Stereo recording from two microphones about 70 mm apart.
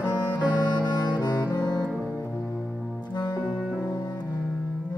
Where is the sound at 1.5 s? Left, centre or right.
Left.